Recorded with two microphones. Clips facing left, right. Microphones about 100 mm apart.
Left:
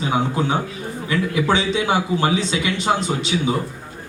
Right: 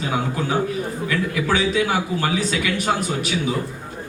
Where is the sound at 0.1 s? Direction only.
25° left (ahead or behind).